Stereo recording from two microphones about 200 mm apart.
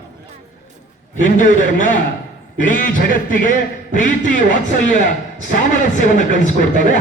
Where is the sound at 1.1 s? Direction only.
40° left (ahead or behind).